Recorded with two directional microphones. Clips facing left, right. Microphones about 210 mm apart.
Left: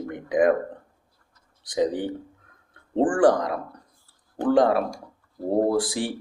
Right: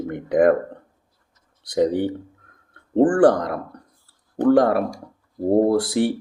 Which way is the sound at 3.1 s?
60° right (ahead or behind).